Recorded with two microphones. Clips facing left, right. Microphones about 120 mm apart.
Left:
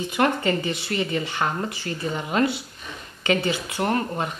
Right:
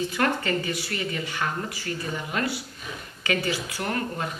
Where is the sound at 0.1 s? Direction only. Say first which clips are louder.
Left 3 dB; 20° left (ahead or behind).